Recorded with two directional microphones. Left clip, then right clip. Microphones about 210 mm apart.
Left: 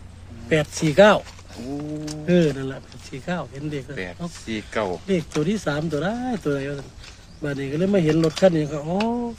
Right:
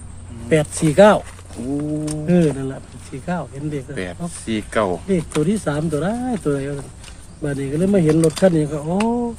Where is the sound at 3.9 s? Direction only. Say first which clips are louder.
Right 4 dB; 25° right (ahead or behind).